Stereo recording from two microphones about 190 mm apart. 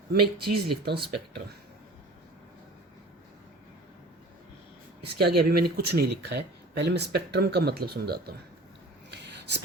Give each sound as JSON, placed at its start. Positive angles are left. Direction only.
{"t": 0.1, "sound": "speech", "side_deg": -55}
{"t": 5.0, "sound": "speech", "side_deg": -55}
{"t": 9.0, "sound": "a sound", "side_deg": -60}